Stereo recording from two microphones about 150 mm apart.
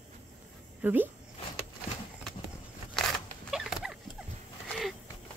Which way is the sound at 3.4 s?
5° right (ahead or behind).